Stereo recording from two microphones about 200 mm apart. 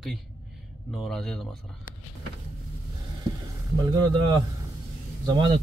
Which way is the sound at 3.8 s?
20° right (ahead or behind).